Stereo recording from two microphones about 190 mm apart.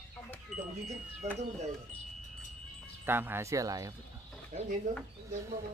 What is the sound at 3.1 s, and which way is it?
Speech, 10° right (ahead or behind).